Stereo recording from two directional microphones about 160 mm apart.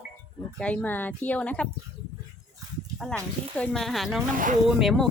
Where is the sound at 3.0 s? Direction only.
5° left (ahead or behind).